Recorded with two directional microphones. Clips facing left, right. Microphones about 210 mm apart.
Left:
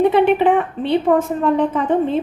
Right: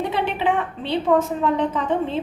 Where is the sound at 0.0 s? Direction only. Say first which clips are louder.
Left 9 dB; 55° left (ahead or behind).